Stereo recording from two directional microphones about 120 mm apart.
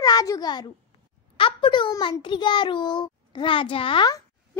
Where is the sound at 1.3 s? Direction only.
45° left (ahead or behind).